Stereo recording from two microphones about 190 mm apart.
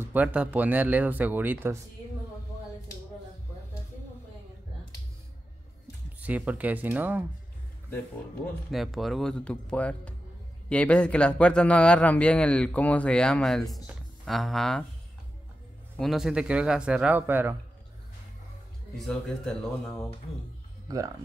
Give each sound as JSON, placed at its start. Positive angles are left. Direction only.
{"t": 0.0, "sound": "speech", "side_deg": -10}
{"t": 6.2, "sound": "speech", "side_deg": -10}
{"t": 8.6, "sound": "speech", "side_deg": 0}
{"t": 16.0, "sound": "speech", "side_deg": 0}
{"t": 18.9, "sound": "speech", "side_deg": 5}
{"t": 20.9, "sound": "speech", "side_deg": -20}